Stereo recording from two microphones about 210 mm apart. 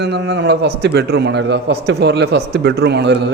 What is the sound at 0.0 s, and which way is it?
A man's voice, 55° right (ahead or behind).